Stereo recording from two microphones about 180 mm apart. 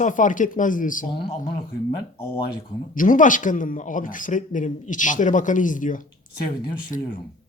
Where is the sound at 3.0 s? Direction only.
45° left (ahead or behind).